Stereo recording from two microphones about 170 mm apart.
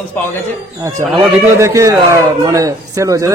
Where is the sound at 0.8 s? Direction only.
15° right (ahead or behind).